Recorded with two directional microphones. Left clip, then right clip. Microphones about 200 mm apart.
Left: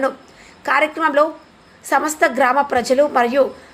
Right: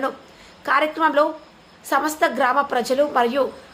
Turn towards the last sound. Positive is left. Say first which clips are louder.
# left 4 dB
turn(degrees=15)  # may be behind; listen again after turning